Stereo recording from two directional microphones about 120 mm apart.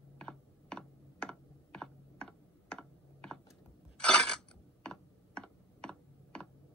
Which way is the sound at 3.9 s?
10° left (ahead or behind).